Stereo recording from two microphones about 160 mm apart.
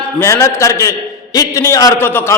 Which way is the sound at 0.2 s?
15° left (ahead or behind).